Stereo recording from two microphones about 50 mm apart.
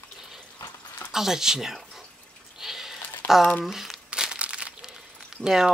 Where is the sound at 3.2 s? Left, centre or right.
Left.